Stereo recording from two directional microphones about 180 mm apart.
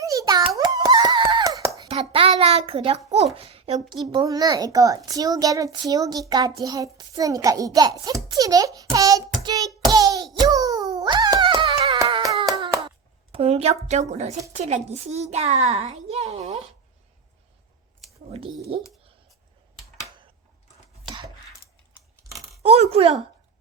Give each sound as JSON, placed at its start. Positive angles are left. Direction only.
{"t": 0.0, "sound": "hands", "side_deg": -20}
{"t": 1.9, "sound": "a sound", "side_deg": -30}
{"t": 3.3, "sound": "a child's voice", "side_deg": -35}
{"t": 3.8, "sound": "a child's voice", "side_deg": -20}
{"t": 8.0, "sound": "a sound", "side_deg": -20}
{"t": 11.9, "sound": "hands", "side_deg": -25}
{"t": 13.3, "sound": "a woman's voice", "side_deg": -35}
{"t": 22.6, "sound": "speech", "side_deg": -35}